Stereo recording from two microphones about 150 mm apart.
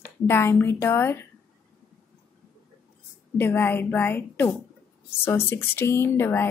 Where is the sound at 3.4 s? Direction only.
15° left (ahead or behind).